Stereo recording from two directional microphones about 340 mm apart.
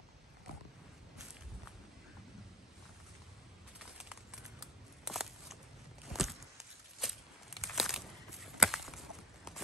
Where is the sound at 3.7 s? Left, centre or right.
Centre.